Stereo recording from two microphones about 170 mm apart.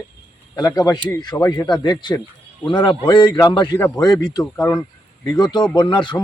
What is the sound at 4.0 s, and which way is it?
Speech, 25° left (ahead or behind).